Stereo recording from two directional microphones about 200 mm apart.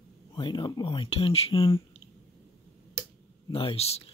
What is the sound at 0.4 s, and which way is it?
Speech, 20° left (ahead or behind).